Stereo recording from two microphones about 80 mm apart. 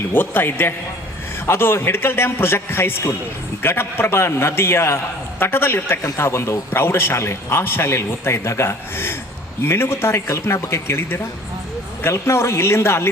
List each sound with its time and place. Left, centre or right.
0.1 s a man's voice: left